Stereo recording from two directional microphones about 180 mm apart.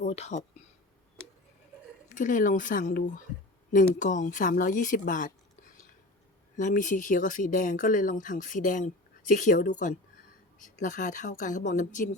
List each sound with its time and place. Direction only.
0.0 s speech: 40° left (ahead or behind)
2.0 s speech: 45° left (ahead or behind)
6.6 s speech: 45° left (ahead or behind)